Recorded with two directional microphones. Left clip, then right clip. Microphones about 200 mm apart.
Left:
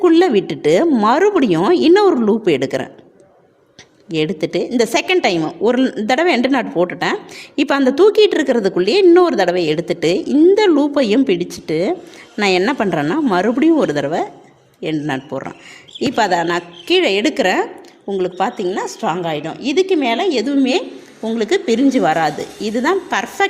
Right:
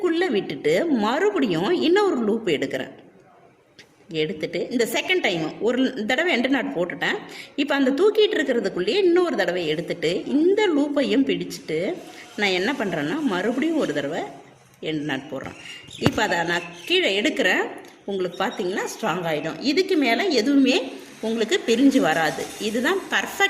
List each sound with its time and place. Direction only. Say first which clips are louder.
0.0 s a woman's voice: left 10 dB; 40° left (ahead or behind)
4.1 s a woman's voice: left 7 dB; 45° left (ahead or behind)